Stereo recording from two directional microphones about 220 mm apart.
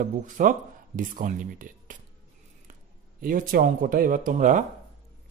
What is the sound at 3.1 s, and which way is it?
Speech, 40° right (ahead or behind).